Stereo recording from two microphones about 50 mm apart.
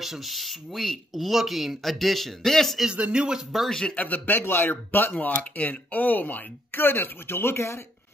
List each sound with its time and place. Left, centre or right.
0.0 s speech: centre
2.9 s speech: centre
3.9 s a man's voice: left
5.2 s speech: left